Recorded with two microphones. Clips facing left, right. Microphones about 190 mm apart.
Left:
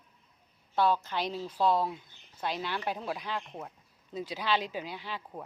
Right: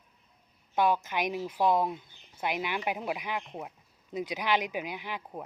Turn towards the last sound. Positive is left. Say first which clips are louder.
# right 2 dB
turn(degrees=-15)  # may be behind; listen again after turning